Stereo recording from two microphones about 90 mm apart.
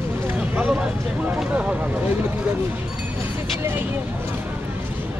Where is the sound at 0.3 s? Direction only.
15° right (ahead or behind).